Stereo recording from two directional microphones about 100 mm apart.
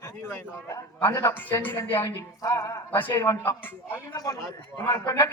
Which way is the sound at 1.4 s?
20° left (ahead or behind).